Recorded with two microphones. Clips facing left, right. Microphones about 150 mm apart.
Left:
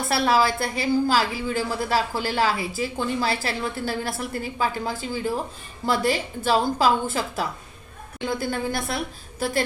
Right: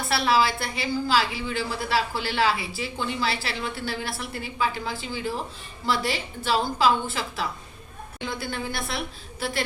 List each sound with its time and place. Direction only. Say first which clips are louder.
0.1 s a woman's voice: left 2 dB; 45° left (ahead or behind)